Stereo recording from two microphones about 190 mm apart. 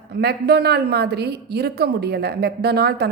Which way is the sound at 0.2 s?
60° right (ahead or behind).